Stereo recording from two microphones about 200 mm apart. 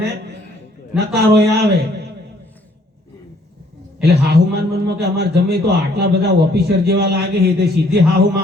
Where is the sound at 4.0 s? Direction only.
55° right (ahead or behind).